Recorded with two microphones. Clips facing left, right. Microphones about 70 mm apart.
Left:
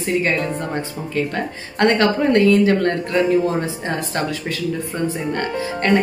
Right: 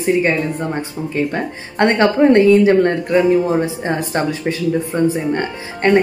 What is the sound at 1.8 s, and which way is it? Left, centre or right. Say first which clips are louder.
Speech: right 3 dB; right.